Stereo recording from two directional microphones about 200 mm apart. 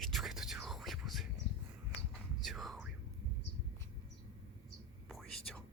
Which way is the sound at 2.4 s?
Centre (ahead or behind).